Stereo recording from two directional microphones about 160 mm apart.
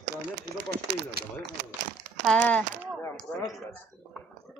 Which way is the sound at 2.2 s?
10° left (ahead or behind).